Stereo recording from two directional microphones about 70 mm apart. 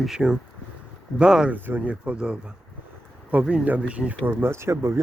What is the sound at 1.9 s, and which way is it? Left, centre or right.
Speech, centre.